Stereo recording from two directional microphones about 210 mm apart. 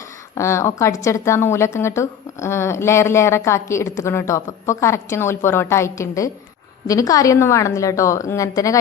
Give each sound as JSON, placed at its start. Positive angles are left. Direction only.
{"t": 0.3, "sound": "a woman's voice", "side_deg": 15}